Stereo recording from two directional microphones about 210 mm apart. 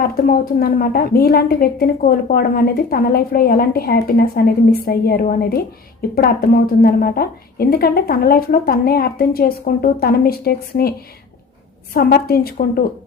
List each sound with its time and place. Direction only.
0.0 s a woman's voice: 45° left (ahead or behind)
11.9 s a woman's voice: 45° left (ahead or behind)